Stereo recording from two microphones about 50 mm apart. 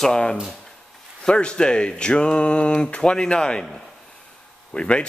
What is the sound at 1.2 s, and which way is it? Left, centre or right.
Speech, centre.